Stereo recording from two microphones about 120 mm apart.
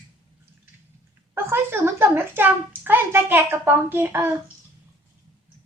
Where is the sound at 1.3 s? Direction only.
20° right (ahead or behind).